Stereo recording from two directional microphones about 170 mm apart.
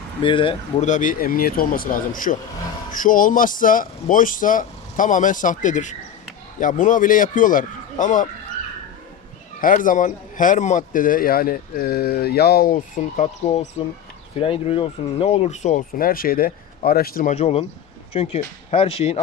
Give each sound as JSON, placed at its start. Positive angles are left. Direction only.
{"t": 0.2, "sound": "speech", "side_deg": 30}
{"t": 0.9, "sound": "a man's voice", "side_deg": 50}
{"t": 9.6, "sound": "a man's voice", "side_deg": 50}
{"t": 17.3, "sound": "speech", "side_deg": 35}